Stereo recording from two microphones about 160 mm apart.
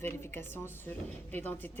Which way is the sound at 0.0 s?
15° left (ahead or behind).